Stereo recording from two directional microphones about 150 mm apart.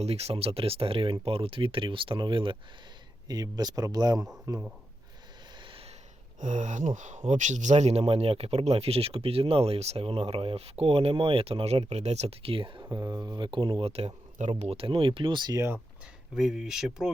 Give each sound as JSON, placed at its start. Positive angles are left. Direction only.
{"t": 0.0, "sound": "speech", "side_deg": -45}
{"t": 5.5, "sound": "snort", "side_deg": -35}
{"t": 6.4, "sound": "speech", "side_deg": -55}
{"t": 16.3, "sound": "speech", "side_deg": -5}